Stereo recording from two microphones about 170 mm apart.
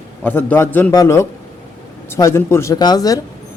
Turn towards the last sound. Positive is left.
turn(degrees=20)  # may be behind; listen again after turning